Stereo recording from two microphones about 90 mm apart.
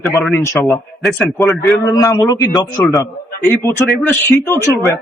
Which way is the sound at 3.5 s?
25° left (ahead or behind).